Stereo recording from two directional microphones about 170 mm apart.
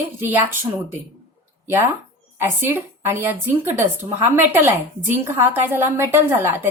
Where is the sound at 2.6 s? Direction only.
15° right (ahead or behind).